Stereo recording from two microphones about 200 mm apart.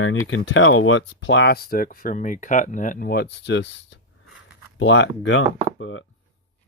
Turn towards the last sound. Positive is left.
turn(degrees=75)  # may be behind; listen again after turning